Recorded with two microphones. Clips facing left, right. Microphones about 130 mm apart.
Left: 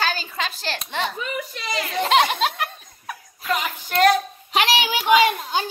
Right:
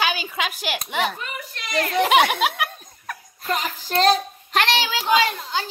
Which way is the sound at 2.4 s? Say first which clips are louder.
Right 1 dB; 5° right (ahead or behind).